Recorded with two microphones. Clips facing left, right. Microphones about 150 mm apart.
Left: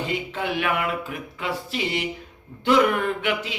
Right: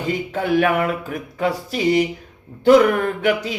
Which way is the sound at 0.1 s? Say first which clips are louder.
Right 7 dB; 45° right (ahead or behind).